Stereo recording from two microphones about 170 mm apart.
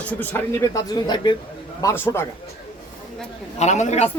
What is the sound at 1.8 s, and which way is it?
Speech, 15° left (ahead or behind).